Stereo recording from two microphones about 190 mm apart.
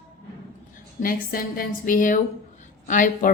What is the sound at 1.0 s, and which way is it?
A woman's voice, 50° left (ahead or behind).